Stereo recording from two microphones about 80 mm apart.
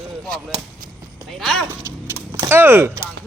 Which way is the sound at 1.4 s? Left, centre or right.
Centre.